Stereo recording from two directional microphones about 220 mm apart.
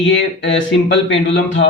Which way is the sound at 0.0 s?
55° left (ahead or behind).